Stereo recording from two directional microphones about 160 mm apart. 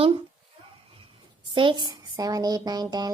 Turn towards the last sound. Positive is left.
turn(degrees=-25)  # may be behind; listen again after turning